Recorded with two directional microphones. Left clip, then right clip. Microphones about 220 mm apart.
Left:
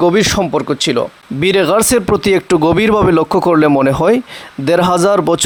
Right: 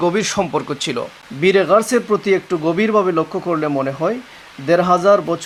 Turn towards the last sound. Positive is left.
turn(degrees=45)  # may be behind; listen again after turning